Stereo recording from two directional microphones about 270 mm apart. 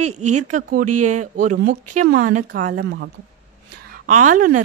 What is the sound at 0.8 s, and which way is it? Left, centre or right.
Speech, right.